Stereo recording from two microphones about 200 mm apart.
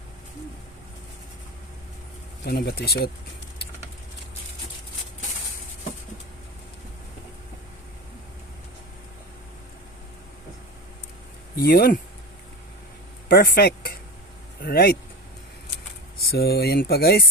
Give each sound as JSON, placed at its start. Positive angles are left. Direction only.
{"t": 2.4, "sound": "speech", "side_deg": 50}
{"t": 11.5, "sound": "speech", "side_deg": 50}
{"t": 13.2, "sound": "speech", "side_deg": 45}
{"t": 16.2, "sound": "speech", "side_deg": 50}